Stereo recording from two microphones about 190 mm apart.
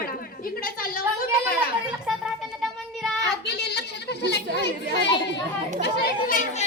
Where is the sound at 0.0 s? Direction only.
50° left (ahead or behind).